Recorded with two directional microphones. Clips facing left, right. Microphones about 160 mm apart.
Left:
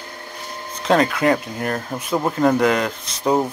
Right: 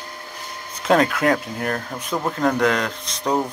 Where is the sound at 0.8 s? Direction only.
Centre (ahead or behind).